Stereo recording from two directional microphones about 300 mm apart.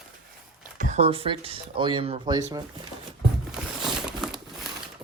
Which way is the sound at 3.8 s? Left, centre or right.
Centre.